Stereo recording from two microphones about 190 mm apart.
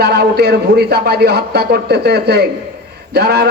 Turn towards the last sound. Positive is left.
turn(degrees=-60)  # may be behind; listen again after turning